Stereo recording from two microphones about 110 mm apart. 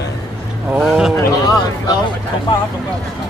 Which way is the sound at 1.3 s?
35° left (ahead or behind).